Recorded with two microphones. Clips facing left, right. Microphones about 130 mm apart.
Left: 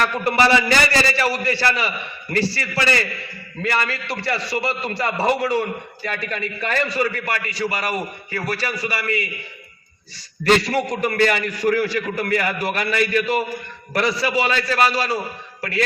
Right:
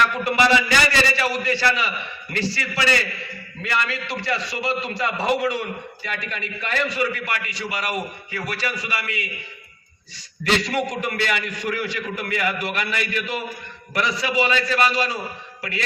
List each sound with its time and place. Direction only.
0.0 s a man's voice: 35° left (ahead or behind)
10.4 s a man's voice: 40° left (ahead or behind)